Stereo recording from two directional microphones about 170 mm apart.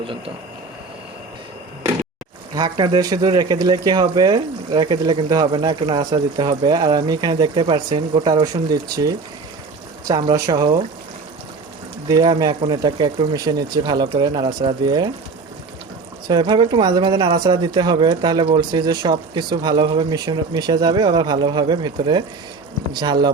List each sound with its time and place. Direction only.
2.6 s speech: 25° right (ahead or behind)
10.1 s speech: 25° right (ahead or behind)
12.0 s speech: 25° right (ahead or behind)
16.2 s speech: 25° right (ahead or behind)